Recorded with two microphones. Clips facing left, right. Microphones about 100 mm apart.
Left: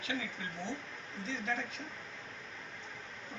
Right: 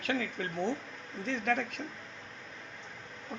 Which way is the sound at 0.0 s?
55° right (ahead or behind).